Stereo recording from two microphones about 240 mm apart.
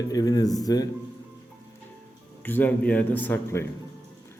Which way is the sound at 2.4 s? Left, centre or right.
Centre.